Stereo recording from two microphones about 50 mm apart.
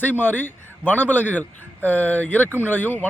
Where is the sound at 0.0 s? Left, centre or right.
Left.